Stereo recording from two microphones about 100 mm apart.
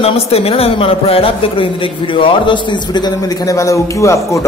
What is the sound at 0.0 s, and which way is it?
A man's voice, 80° left.